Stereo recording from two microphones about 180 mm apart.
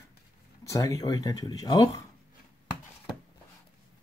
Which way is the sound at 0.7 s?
20° left (ahead or behind).